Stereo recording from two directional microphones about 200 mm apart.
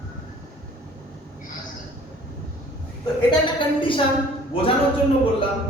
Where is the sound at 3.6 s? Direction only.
25° left (ahead or behind).